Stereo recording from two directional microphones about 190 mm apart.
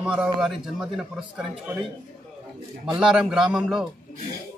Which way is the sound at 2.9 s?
5° right (ahead or behind).